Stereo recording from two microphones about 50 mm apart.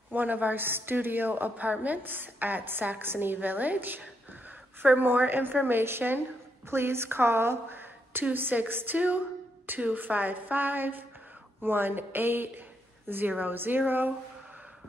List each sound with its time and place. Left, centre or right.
0.1 s a woman's voice: right